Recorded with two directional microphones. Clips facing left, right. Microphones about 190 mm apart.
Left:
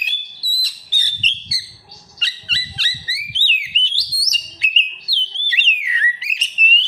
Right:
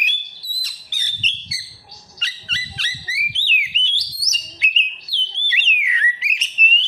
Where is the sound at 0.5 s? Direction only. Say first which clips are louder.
Left 5 dB; 30° left (ahead or behind).